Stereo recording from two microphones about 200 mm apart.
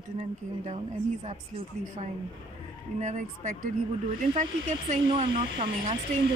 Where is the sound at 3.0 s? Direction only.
40° right (ahead or behind).